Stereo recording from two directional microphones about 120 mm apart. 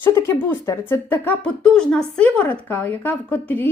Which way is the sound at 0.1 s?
25° left (ahead or behind).